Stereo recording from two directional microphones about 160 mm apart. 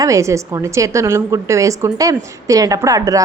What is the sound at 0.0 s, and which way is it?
A woman's voice, 20° right (ahead or behind).